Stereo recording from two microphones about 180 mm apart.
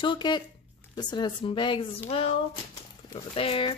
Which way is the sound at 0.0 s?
25° left (ahead or behind).